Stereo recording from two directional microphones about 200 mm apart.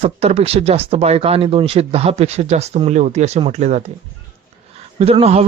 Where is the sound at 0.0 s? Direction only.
30° right (ahead or behind).